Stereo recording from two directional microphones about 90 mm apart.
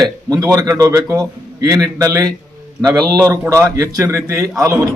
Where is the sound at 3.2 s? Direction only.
35° right (ahead or behind).